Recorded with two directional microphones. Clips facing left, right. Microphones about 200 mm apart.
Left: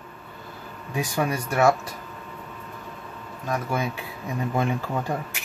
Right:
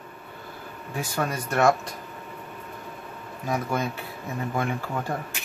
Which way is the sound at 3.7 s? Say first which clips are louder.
Even; 10° left (ahead or behind).